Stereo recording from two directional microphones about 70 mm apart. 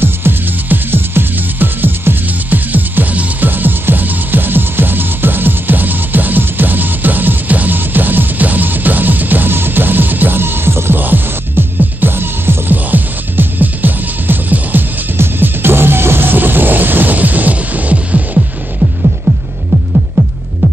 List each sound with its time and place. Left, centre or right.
0.0 s music: right
19.3 s throbbing: right